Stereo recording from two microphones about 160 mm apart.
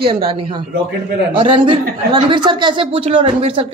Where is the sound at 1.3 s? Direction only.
30° right (ahead or behind).